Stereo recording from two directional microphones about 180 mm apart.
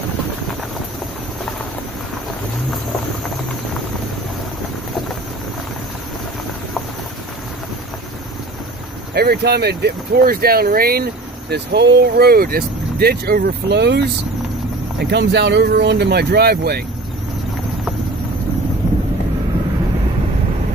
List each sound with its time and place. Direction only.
9.1 s speech: 60° right (ahead or behind)